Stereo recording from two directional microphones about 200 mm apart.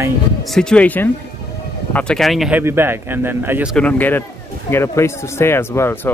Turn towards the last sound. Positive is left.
turn(degrees=10)  # may be behind; listen again after turning